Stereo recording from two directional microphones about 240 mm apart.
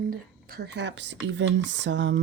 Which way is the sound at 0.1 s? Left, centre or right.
Right.